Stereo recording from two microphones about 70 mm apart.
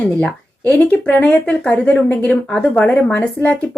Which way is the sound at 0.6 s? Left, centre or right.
Left.